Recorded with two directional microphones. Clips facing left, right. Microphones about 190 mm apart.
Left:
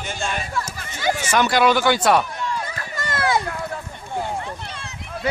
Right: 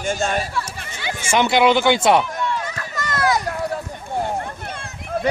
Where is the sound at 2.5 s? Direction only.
35° left (ahead or behind).